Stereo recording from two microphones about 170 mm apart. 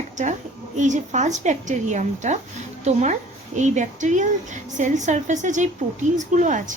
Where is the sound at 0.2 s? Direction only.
45° right (ahead or behind).